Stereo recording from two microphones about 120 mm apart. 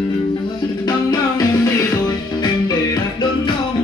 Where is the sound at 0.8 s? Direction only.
30° left (ahead or behind).